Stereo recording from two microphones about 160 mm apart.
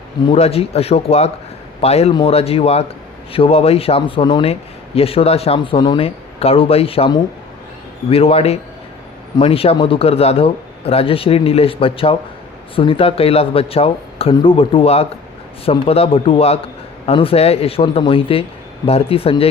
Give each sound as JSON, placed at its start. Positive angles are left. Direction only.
{"t": 0.3, "sound": "a man's voice", "side_deg": 40}